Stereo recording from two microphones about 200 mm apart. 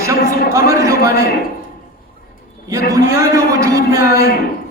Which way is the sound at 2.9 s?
15° right (ahead or behind).